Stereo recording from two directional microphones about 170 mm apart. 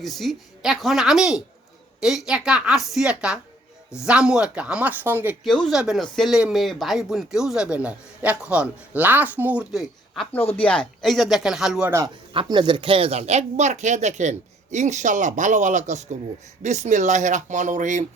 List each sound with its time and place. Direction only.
0.0 s speech: centre (ahead or behind)
10.6 s speech: 10° left (ahead or behind)
11.9 s speech: 15° right (ahead or behind)
12.3 s speech: 30° right (ahead or behind); by 18.0 s 50° right (ahead or behind)